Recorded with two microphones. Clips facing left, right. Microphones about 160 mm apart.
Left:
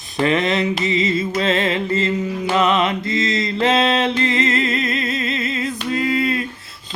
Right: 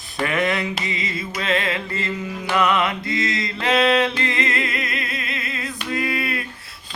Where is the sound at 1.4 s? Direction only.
30° left (ahead or behind).